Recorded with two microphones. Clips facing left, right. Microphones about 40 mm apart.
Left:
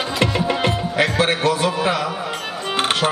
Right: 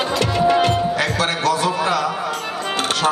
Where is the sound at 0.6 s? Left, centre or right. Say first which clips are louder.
Right 1 dB; left.